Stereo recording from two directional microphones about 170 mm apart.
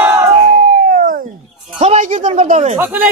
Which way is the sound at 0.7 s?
50° right (ahead or behind).